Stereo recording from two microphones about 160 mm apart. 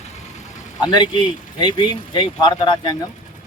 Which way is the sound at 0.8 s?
25° left (ahead or behind).